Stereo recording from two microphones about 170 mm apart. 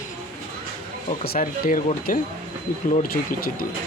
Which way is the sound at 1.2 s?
60° left (ahead or behind).